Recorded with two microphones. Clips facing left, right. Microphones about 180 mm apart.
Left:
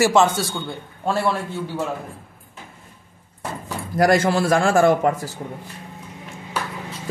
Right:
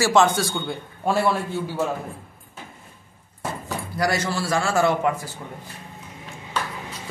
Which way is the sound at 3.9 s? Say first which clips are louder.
Left 8 dB; 50° left (ahead or behind).